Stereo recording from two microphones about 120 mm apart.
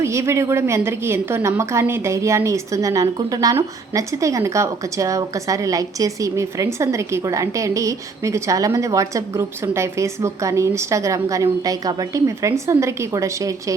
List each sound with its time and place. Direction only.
0.0 s a woman's voice: 25° right (ahead or behind)